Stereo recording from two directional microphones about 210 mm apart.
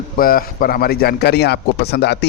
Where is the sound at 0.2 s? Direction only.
45° left (ahead or behind).